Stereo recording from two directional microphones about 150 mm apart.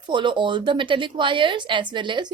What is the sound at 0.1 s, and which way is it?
Speech, 30° right (ahead or behind).